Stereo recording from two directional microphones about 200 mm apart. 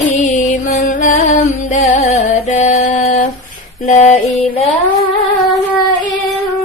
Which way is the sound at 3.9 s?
35° left (ahead or behind).